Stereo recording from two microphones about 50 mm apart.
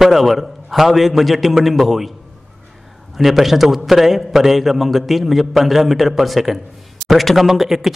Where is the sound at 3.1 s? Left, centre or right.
Centre.